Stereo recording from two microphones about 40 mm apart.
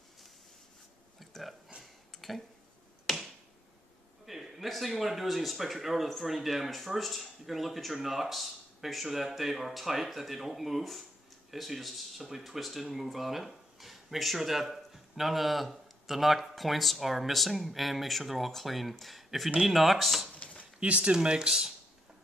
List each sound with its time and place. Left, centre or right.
1.3 s speech: centre
1.8 s a sound: centre
3.1 s finger snapping: centre
4.3 s speech: centre
20.3 s a sound: left
20.8 s speech: right; by 21.7 s centre